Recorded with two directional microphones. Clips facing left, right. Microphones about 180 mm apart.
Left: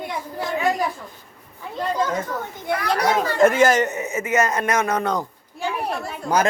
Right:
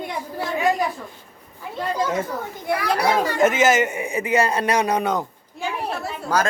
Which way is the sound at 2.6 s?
5° right (ahead or behind).